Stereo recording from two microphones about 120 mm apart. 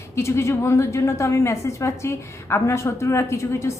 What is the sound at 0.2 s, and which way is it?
A woman's voice, 25° left (ahead or behind).